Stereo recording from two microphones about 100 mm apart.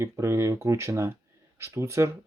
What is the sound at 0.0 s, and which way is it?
Speech, 25° right (ahead or behind).